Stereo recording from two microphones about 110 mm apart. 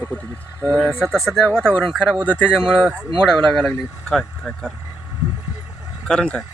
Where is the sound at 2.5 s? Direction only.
5° right (ahead or behind).